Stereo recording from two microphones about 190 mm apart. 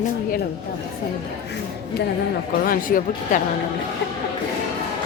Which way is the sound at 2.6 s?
45° left (ahead or behind).